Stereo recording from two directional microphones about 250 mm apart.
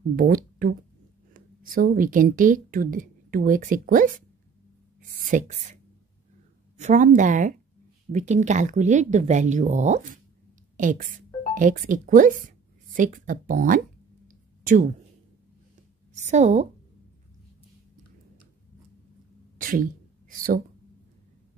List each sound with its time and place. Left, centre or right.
0.1 s a woman's voice: right
5.3 s speech: right
6.8 s a woman's voice: right
16.2 s speech: right
19.6 s a sound: right